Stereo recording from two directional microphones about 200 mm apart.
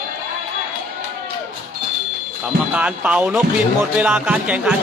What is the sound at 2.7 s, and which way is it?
Speech, 5° right (ahead or behind).